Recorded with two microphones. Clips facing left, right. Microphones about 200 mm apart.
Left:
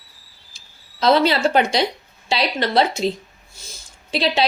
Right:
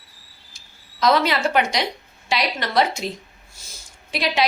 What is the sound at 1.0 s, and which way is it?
A woman's voice, 30° left (ahead or behind).